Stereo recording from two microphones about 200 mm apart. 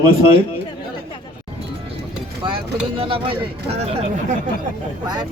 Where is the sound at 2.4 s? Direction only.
25° right (ahead or behind).